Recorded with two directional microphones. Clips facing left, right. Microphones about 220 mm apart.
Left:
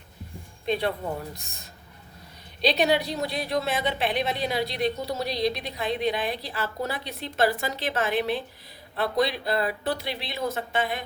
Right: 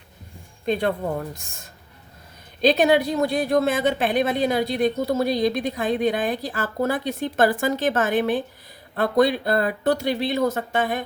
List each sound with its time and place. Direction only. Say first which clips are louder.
0.6 s speech: right 4 dB; 50° right (ahead or behind)